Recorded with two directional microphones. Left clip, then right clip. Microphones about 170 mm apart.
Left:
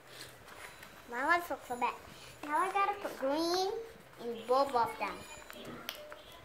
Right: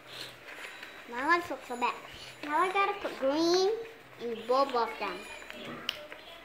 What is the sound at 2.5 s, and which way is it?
Speech, 40° left (ahead or behind).